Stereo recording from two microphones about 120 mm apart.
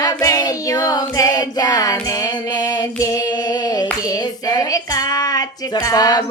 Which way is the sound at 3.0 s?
30° left (ahead or behind).